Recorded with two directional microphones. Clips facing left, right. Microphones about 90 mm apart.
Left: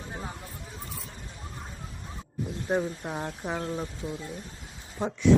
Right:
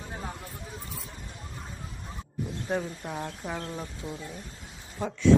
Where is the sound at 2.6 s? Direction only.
20° left (ahead or behind).